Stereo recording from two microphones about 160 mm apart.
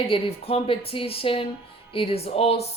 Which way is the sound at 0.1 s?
40° left (ahead or behind).